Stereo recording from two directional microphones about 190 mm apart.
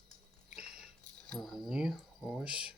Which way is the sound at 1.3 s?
Centre (ahead or behind).